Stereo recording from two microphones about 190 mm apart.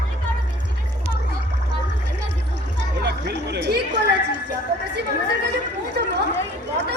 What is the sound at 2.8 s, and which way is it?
Chatter, 65° right (ahead or behind).